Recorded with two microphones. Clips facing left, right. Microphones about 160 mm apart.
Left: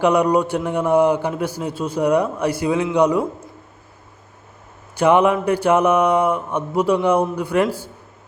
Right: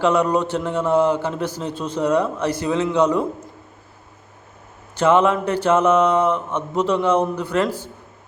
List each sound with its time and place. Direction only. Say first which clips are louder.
0.0 s a man's voice: left 2 dB; 15° left (ahead or behind)
4.9 s a man's voice: left 1 dB; 15° left (ahead or behind)